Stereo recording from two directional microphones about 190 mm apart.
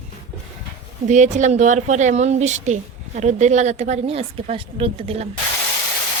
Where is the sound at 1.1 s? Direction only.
40° right (ahead or behind).